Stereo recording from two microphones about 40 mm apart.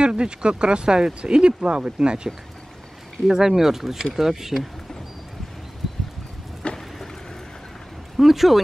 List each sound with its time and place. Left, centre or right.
0.0 s speech: right
3.3 s speech: centre
6.6 s a sound: left
8.2 s speech: centre